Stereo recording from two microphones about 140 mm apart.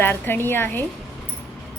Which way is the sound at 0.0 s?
15° left (ahead or behind).